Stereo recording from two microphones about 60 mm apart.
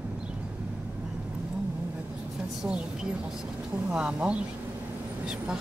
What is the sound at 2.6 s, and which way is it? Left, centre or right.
Speech, centre.